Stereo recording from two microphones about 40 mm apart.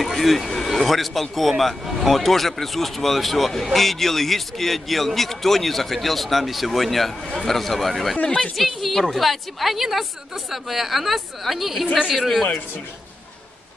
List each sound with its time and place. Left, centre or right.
0.0 s a sound: centre
0.7 s a man's voice: centre
8.2 s a woman's voice: left
8.5 s a man's voice: centre